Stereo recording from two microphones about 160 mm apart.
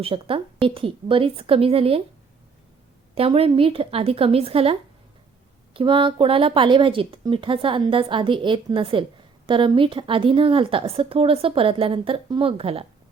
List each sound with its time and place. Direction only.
0.0 s a woman's voice: 35° right (ahead or behind)
3.2 s a woman's voice: 35° right (ahead or behind)